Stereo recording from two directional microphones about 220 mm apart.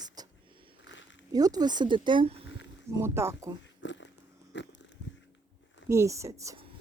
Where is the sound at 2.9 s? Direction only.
10° right (ahead or behind).